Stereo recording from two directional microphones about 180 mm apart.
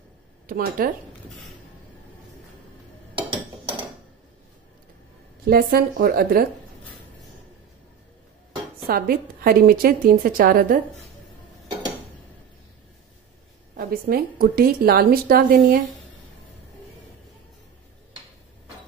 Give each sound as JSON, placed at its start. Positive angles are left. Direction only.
{"t": 0.5, "sound": "speech", "side_deg": -50}
{"t": 5.4, "sound": "a woman's voice", "side_deg": -55}
{"t": 8.8, "sound": "a woman's voice", "side_deg": -55}
{"t": 13.7, "sound": "a woman's voice", "side_deg": -55}